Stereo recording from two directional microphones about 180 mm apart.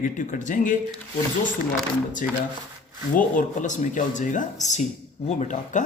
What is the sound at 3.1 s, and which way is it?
Speech, 45° left (ahead or behind).